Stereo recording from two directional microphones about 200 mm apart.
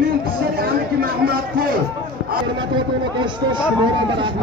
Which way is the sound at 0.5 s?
50° right (ahead or behind).